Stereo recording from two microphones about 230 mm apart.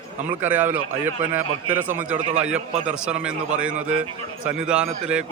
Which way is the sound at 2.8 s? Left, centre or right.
Centre.